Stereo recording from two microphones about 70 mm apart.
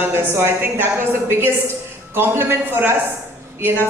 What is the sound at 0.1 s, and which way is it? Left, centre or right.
A woman's voice, right.